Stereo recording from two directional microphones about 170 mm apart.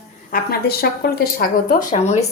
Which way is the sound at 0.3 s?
60° left (ahead or behind).